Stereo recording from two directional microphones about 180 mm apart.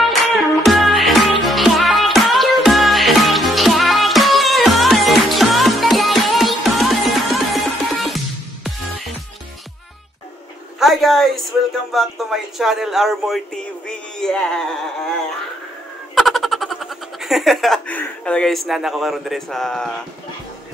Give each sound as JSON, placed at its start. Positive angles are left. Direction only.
{"t": 0.0, "sound": "music", "side_deg": 0}
{"t": 10.8, "sound": "a sound", "side_deg": 0}
{"t": 11.9, "sound": "speech", "side_deg": 0}
{"t": 16.2, "sound": "speech", "side_deg": 0}